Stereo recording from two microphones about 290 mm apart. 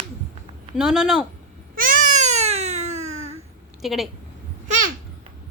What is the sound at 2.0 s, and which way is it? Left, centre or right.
Baby cry, right.